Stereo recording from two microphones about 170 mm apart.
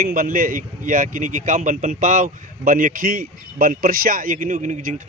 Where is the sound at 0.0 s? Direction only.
55° right (ahead or behind).